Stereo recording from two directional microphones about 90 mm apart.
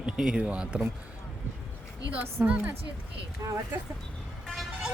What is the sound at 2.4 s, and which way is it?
Speech, 15° right (ahead or behind).